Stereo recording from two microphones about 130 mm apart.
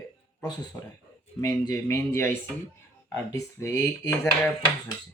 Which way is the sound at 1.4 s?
25° left (ahead or behind).